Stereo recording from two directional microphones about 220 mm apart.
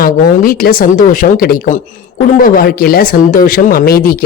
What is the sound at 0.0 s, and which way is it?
Speech, 40° left (ahead or behind).